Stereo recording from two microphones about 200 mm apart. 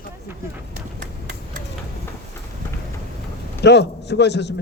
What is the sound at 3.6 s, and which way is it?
Speech, 60° left (ahead or behind).